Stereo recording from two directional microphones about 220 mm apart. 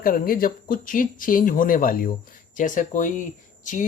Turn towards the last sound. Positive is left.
turn(degrees=35)  # may be behind; listen again after turning